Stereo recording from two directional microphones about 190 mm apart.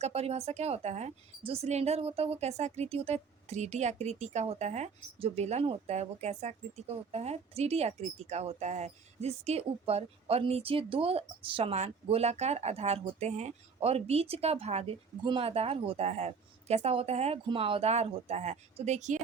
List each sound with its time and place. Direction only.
0.0 s a woman's voice: 35° right (ahead or behind)